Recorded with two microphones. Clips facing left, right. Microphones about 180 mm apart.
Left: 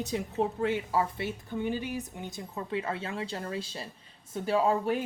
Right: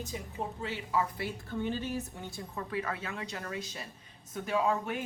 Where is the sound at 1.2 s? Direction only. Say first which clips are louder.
Left 2 dB; 15° left (ahead or behind).